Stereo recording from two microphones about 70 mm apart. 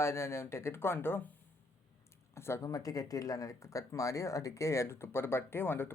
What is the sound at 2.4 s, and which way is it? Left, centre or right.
Speech, left.